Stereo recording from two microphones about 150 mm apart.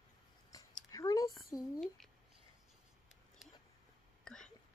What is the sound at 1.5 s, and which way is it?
Speech, 25° left (ahead or behind).